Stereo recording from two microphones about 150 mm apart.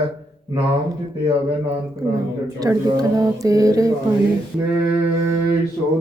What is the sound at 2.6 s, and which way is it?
Speech, 25° right (ahead or behind).